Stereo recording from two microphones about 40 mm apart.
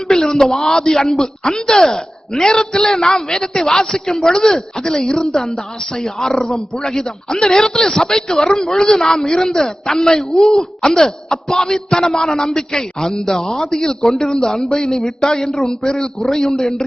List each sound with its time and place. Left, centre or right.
0.1 s a man's voice: centre
15.7 s a man's voice: centre
16.2 s a man's voice: centre